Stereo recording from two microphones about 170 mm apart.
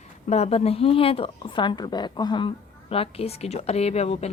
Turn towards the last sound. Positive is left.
turn(degrees=40)  # may be behind; listen again after turning